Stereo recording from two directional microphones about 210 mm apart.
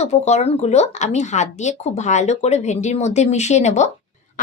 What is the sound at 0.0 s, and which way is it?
A woman's voice, 30° left (ahead or behind).